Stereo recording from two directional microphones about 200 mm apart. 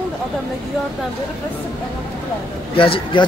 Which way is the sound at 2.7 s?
25° left (ahead or behind).